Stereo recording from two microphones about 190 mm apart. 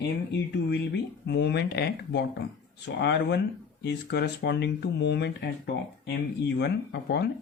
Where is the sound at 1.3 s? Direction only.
60° left (ahead or behind).